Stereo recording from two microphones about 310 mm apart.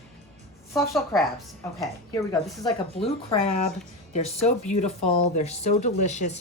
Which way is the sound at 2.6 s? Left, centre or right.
Centre.